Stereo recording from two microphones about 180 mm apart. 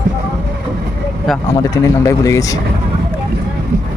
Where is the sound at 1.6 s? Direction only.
15° left (ahead or behind).